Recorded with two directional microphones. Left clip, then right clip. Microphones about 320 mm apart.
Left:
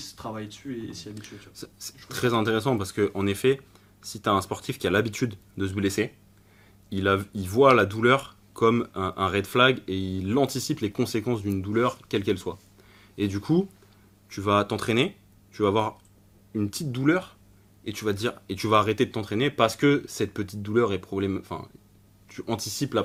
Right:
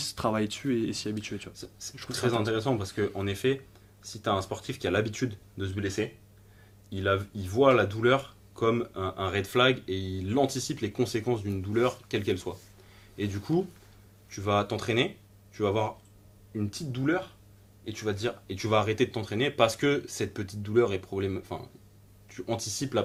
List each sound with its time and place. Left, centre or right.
1.1 s speech: left